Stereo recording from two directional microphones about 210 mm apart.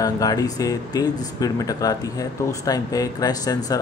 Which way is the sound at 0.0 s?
15° left (ahead or behind).